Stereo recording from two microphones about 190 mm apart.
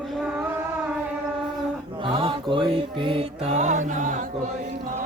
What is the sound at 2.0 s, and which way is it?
Music, 30° right (ahead or behind).